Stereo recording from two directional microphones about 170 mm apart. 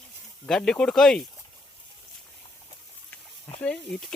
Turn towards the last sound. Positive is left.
turn(degrees=5)  # may be behind; listen again after turning